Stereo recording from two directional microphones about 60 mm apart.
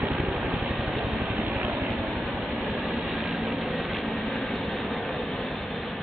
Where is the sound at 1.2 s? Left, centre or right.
Right.